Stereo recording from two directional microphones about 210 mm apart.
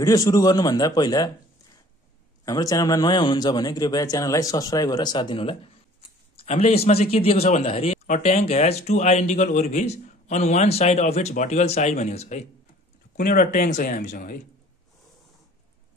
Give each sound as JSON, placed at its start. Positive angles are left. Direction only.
{"t": 0.0, "sound": "a man's voice", "side_deg": 15}
{"t": 2.4, "sound": "a man's voice", "side_deg": 15}
{"t": 13.1, "sound": "a man's voice", "side_deg": 45}